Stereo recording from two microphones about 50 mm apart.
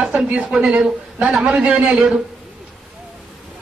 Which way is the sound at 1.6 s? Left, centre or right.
Right.